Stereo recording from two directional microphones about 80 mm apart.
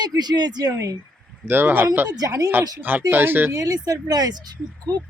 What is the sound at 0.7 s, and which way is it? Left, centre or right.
Speech, right.